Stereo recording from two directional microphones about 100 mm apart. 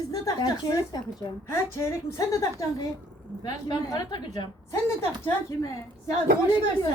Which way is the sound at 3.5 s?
45° left (ahead or behind).